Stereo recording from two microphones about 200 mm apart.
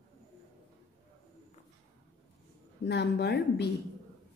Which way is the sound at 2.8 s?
55° left (ahead or behind).